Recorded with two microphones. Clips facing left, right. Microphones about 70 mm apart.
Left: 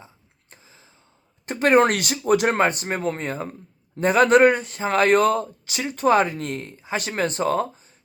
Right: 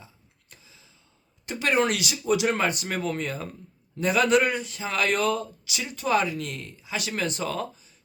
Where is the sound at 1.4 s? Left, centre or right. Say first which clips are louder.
Left 7 dB; left.